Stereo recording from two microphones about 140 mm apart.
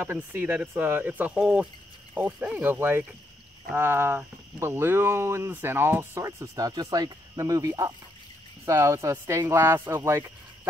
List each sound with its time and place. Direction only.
0.0 s speech: 15° right (ahead or behind)